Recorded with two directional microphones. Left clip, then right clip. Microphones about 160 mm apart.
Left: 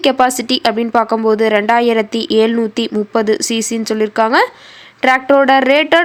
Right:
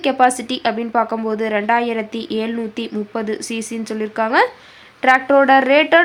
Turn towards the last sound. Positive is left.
turn(degrees=30)  # may be behind; listen again after turning